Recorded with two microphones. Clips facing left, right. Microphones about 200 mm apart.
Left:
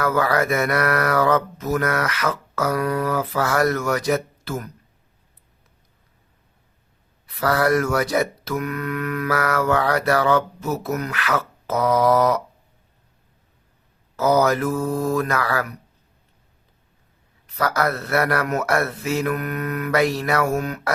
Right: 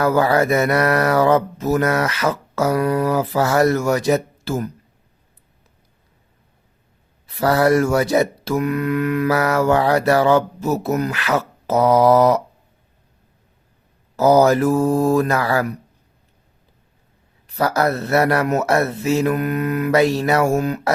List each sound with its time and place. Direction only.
0.0 s speech: 30° right (ahead or behind)
7.3 s speech: 25° right (ahead or behind)
14.2 s mantra: 30° right (ahead or behind)
17.4 s speech: 30° right (ahead or behind)